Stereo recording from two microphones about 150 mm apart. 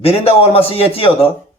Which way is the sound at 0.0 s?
40° left (ahead or behind).